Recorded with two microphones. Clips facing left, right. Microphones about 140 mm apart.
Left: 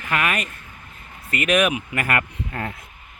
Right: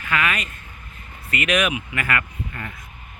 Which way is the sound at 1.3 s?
40° left (ahead or behind).